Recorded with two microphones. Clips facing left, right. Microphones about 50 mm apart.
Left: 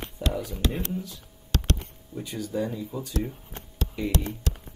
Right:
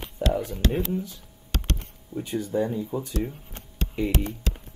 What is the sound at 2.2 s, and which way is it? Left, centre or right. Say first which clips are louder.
Speech: right 4 dB; right.